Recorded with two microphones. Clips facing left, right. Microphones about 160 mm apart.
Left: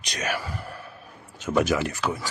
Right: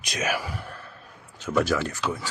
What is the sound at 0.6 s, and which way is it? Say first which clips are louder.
Sigh: left 2 dB; 5° left (ahead or behind).